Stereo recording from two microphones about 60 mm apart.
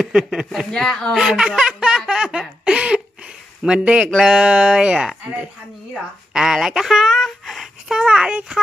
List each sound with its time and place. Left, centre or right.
0.1 s speech: centre
0.7 s speech: centre
1.2 s a sound: centre
2.0 s speech: centre
2.6 s a sound: centre
4.2 s speech: centre
7.9 s speech: centre